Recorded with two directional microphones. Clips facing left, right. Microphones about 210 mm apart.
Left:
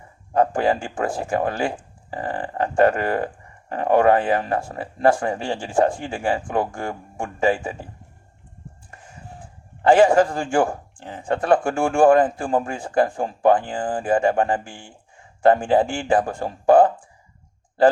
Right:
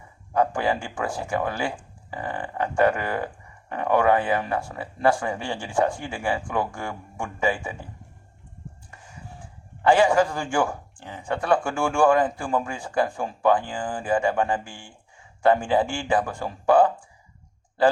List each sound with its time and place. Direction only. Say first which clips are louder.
0.3 s speech: left 4 dB; 35° left (ahead or behind)
9.9 s speech: left 4 dB; 35° left (ahead or behind)
14.0 s speech: left 3 dB; 50° left (ahead or behind)
14.3 s speech: left 4 dB; 35° left (ahead or behind)